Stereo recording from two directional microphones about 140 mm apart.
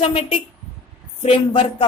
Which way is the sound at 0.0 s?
45° left (ahead or behind).